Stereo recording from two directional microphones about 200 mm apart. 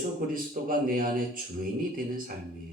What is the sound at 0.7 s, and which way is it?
Speech, 45° right (ahead or behind).